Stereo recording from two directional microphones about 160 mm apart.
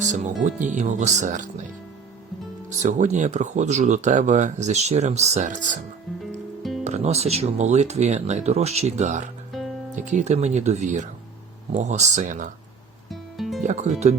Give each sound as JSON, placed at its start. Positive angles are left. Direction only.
{"t": 0.4, "sound": "speech", "side_deg": -50}
{"t": 2.6, "sound": "speech", "side_deg": -50}
{"t": 6.8, "sound": "speech", "side_deg": -45}
{"t": 13.1, "sound": "music", "side_deg": 0}
{"t": 13.6, "sound": "speech", "side_deg": -50}